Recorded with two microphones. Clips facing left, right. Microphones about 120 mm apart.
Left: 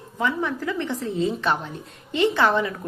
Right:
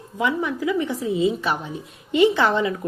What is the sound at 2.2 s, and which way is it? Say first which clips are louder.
Speech: right 2 dB; 20° right (ahead or behind).